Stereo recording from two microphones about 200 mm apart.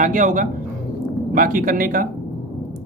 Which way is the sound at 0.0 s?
40° right (ahead or behind).